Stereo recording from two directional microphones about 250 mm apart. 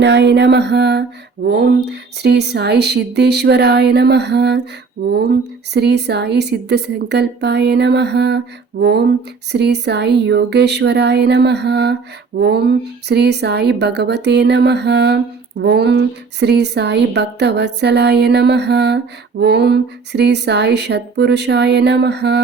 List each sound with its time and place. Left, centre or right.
0.0 s speech: right
5.7 s speech: right